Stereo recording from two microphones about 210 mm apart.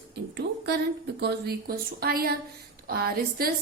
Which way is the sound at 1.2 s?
50° right (ahead or behind).